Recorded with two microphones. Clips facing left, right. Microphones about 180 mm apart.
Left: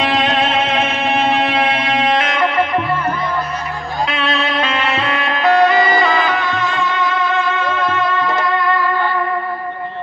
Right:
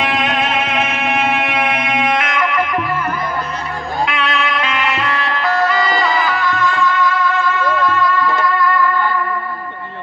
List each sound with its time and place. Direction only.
0.0 s music: 30° left (ahead or behind)
4.1 s music: 30° left (ahead or behind)